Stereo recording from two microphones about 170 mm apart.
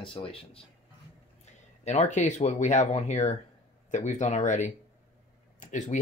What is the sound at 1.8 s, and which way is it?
Speech, 45° left (ahead or behind).